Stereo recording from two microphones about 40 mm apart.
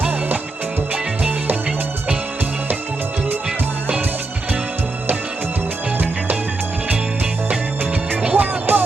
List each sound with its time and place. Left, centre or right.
8.1 s music: right
8.7 s music: right